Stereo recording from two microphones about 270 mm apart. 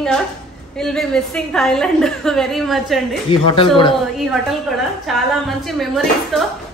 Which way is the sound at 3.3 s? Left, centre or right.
Centre.